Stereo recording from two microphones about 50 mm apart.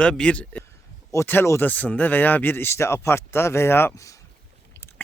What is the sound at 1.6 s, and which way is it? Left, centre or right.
Speech, left.